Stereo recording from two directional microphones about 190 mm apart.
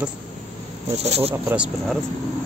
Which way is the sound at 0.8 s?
35° right (ahead or behind).